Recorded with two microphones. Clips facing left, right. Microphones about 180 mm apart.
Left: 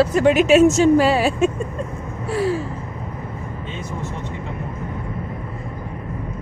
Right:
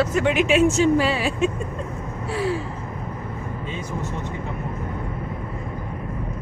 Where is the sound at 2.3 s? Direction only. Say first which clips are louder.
Left 4 dB; 40° left (ahead or behind).